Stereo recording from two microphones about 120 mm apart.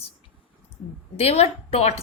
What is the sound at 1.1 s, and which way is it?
Speech, 55° left (ahead or behind).